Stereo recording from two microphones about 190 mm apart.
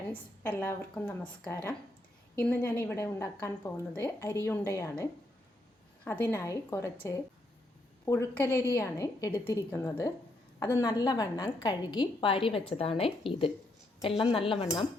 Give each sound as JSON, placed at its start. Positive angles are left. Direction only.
{"t": 0.1, "sound": "a woman's voice", "side_deg": 10}
{"t": 6.1, "sound": "a woman's voice", "side_deg": 10}